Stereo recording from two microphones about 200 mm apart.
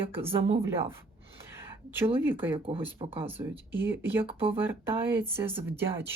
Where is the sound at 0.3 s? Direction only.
30° right (ahead or behind).